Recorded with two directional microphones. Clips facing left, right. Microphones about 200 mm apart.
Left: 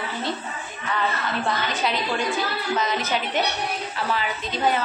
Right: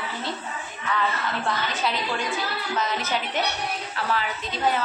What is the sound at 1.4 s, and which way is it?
A woman's voice, 15° left (ahead or behind).